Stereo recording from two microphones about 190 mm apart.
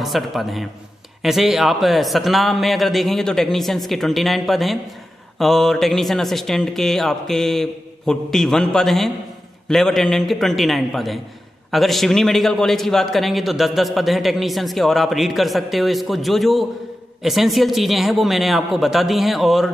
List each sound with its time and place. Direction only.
0.0 s a man's voice: centre (ahead or behind)